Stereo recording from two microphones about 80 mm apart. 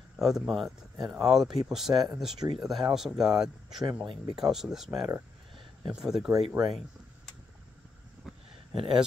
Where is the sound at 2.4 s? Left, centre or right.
Right.